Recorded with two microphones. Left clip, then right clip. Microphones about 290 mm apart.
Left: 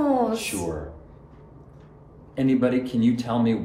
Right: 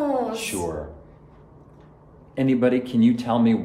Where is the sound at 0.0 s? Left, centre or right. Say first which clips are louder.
Left 2 dB; centre.